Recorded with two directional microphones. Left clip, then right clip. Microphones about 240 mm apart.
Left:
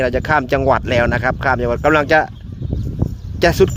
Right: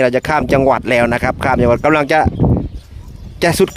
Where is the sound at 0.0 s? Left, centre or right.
Right.